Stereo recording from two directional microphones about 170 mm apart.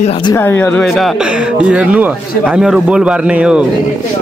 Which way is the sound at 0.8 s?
Centre (ahead or behind).